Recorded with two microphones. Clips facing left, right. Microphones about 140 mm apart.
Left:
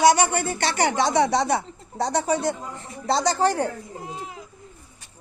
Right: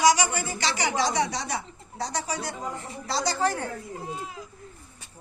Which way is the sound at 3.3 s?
40° left (ahead or behind).